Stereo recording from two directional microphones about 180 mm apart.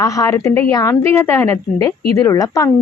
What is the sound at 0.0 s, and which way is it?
A woman's voice, 20° left (ahead or behind).